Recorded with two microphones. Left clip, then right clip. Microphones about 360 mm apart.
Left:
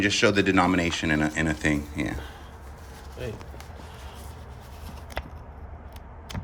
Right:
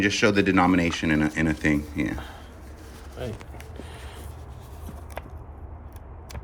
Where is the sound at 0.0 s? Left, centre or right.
Centre.